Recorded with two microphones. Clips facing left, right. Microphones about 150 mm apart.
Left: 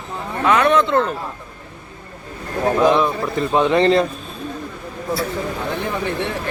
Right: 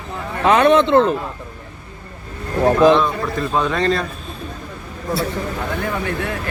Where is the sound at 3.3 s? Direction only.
20° left (ahead or behind).